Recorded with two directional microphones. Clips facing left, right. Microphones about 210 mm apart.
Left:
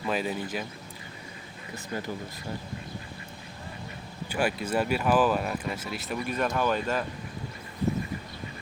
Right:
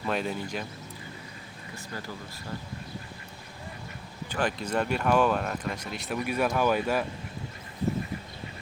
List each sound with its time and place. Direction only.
0.0 s speech: 5° left (ahead or behind)
1.7 s speech: 20° left (ahead or behind)
4.3 s speech: 10° left (ahead or behind)
6.2 s speech: 10° right (ahead or behind)